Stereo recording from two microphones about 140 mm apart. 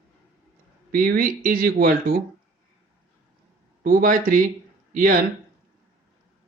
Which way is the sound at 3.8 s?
70° right (ahead or behind).